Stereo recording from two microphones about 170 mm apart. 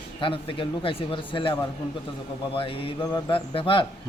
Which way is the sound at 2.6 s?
30° left (ahead or behind).